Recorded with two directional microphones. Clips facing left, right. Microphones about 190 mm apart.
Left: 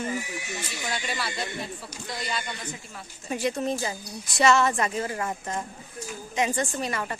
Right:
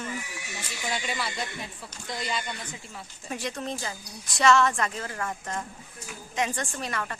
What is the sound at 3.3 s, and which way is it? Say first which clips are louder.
A woman's voice: left 6 dB; 5° left (ahead or behind).